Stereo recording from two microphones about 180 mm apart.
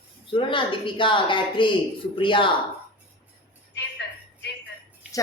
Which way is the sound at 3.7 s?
70° left (ahead or behind).